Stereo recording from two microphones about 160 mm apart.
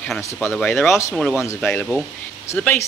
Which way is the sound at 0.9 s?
20° left (ahead or behind).